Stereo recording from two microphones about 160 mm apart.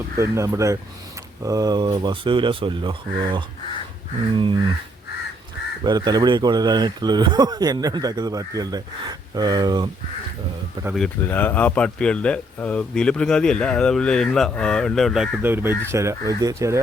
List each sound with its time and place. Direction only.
0.2 s speech: 20° right (ahead or behind)
5.8 s speech: 25° right (ahead or behind)
10.9 s speech: 5° left (ahead or behind)
15.4 s speech: 15° right (ahead or behind)